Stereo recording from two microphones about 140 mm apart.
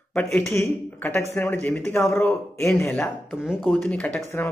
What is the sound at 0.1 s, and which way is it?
A man's voice, 15° left (ahead or behind).